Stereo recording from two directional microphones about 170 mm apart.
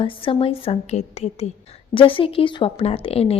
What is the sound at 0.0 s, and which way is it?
A woman's voice, 30° left (ahead or behind).